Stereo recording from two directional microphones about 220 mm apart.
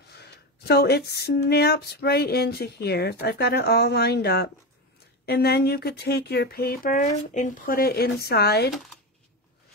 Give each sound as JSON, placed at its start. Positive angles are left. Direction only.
{"t": 0.1, "sound": "speech", "side_deg": 45}